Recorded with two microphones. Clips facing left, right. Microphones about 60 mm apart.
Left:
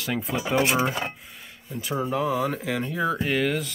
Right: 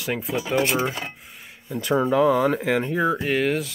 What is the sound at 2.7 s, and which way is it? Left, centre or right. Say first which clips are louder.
Speech: right 6 dB; right.